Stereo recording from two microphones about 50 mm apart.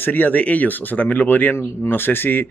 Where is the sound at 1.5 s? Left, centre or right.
Left.